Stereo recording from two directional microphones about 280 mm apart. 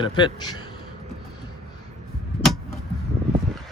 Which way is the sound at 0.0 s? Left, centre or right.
Centre.